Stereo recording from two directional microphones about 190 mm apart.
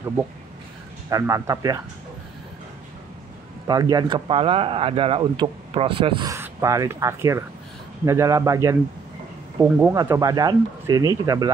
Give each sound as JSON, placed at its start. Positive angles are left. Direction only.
{"t": 1.1, "sound": "speech", "side_deg": -15}
{"t": 3.6, "sound": "speech", "side_deg": -20}
{"t": 6.3, "sound": "speech", "side_deg": -15}